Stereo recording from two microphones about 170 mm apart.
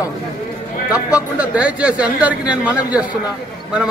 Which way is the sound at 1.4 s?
10° right (ahead or behind).